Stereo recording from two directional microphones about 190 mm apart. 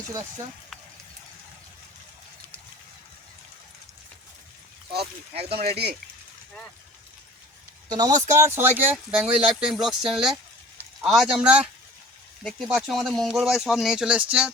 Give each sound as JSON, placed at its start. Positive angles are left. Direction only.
{"t": 4.9, "sound": "speech", "side_deg": -55}
{"t": 7.9, "sound": "speech", "side_deg": -20}